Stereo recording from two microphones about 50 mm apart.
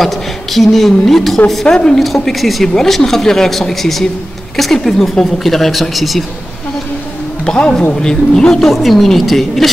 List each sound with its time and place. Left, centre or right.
0.0 s a woman's voice: centre
7.4 s music: centre
8.0 s speech: centre
8.6 s a woman's voice: centre